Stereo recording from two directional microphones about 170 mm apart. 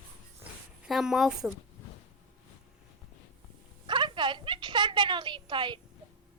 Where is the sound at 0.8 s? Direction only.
Centre (ahead or behind).